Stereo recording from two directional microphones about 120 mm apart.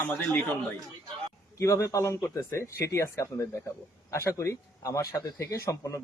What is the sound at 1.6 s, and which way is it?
Speech, 25° left (ahead or behind).